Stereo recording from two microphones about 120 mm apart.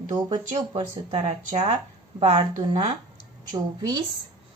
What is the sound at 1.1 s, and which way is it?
Speech, 65° right (ahead or behind).